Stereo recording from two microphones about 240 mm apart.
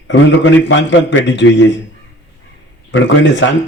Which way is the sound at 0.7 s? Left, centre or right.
Left.